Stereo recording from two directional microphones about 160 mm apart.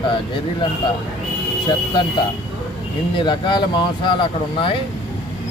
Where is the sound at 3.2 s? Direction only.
30° left (ahead or behind).